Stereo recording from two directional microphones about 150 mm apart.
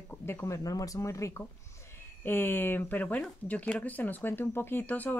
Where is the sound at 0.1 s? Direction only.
15° left (ahead or behind).